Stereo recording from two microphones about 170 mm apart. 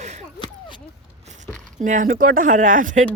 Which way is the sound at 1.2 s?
40° right (ahead or behind).